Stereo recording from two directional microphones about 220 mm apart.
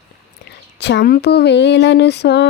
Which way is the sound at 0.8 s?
50° left (ahead or behind).